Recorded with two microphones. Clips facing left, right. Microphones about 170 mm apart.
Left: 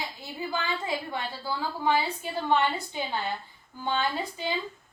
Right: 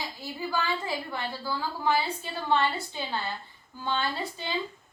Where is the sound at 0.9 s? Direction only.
20° left (ahead or behind).